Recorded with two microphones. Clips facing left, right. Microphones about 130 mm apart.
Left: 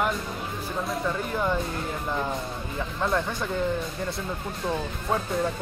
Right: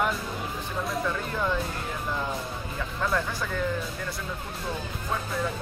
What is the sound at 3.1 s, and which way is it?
Speech, 25° left (ahead or behind).